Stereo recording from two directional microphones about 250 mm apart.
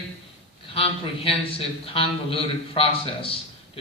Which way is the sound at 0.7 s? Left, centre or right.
Left.